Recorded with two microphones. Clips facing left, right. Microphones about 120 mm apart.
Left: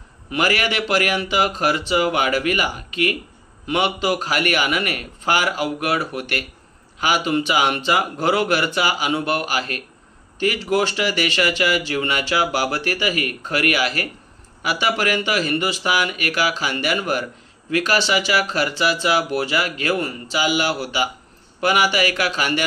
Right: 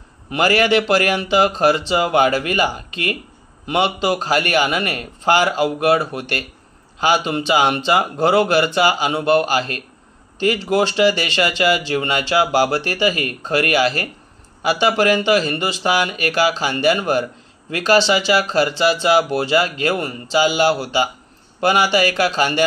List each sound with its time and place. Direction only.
0.3 s speech: 30° right (ahead or behind)